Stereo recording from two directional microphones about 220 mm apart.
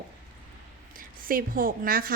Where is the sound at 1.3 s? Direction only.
40° right (ahead or behind).